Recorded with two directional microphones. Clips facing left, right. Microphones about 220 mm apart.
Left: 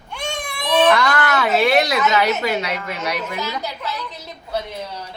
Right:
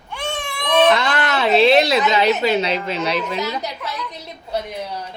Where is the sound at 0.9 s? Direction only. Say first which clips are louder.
Left 1 dB; 20° right (ahead or behind).